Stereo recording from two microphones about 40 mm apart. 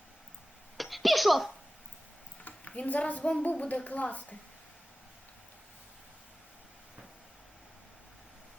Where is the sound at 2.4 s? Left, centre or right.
Left.